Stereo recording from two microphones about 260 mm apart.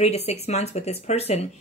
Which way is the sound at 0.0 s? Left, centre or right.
Left.